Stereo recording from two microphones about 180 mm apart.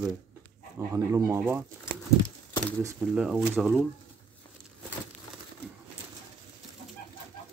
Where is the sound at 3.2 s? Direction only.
5° right (ahead or behind).